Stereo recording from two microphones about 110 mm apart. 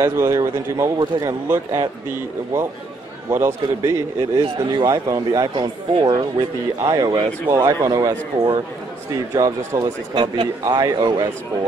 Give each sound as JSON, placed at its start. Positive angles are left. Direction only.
{"t": 0.0, "sound": "speech", "side_deg": -25}
{"t": 3.3, "sound": "speech", "side_deg": -25}
{"t": 4.4, "sound": "speech", "side_deg": -45}
{"t": 9.8, "sound": "speech", "side_deg": -45}